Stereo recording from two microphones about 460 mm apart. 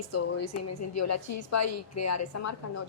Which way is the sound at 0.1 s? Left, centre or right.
Left.